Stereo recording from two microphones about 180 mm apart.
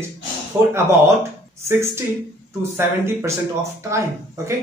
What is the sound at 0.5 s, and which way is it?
A man's voice, 15° right (ahead or behind).